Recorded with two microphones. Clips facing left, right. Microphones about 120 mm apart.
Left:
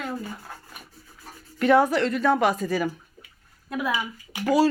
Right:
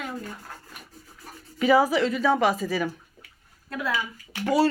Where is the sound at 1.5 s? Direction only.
Centre (ahead or behind).